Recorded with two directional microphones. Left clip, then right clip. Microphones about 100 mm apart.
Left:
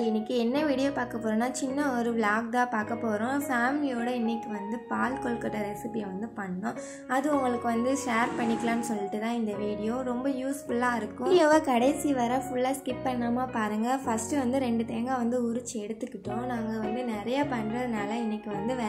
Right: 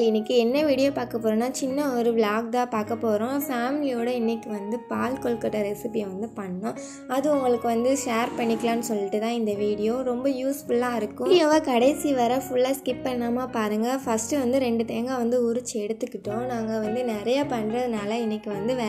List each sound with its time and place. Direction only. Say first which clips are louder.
0.0 s a woman's voice: right 7 dB; 15° right (ahead or behind)
7.1 s a woman's voice: right 5 dB; 10° right (ahead or behind)
11.2 s a woman's voice: right 2 dB; 5° left (ahead or behind); by 15.6 s 10° right (ahead or behind)
16.7 s a woman's voice: right 6 dB; 30° right (ahead or behind)